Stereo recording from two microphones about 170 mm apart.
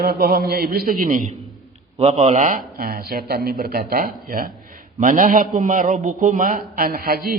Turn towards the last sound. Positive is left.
turn(degrees=-60)  # may be behind; listen again after turning